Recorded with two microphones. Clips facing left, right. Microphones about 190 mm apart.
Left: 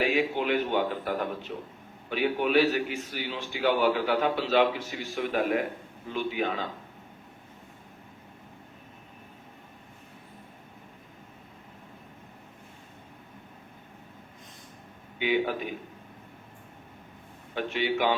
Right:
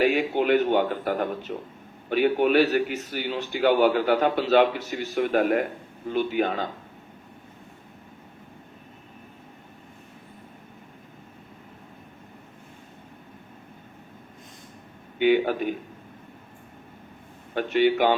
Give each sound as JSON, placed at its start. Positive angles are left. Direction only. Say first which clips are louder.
{"t": 0.1, "sound": "a man's voice", "louder": "right 4 dB", "side_deg": -50}
{"t": 5.1, "sound": "a man's voice", "louder": "right 5 dB", "side_deg": -55}
{"t": 15.2, "sound": "a man's voice", "louder": "right 6 dB", "side_deg": -50}
{"t": 17.5, "sound": "a man's voice", "louder": "right 7 dB", "side_deg": -55}